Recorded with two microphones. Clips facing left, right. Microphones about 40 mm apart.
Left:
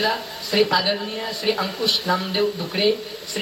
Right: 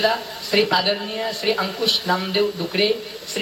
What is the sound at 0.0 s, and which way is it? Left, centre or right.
A man's voice, centre.